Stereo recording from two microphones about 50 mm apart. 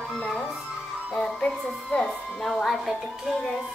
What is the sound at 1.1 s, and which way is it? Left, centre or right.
Speech, centre.